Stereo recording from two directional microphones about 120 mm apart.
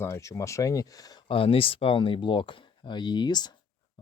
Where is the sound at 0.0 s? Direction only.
25° left (ahead or behind).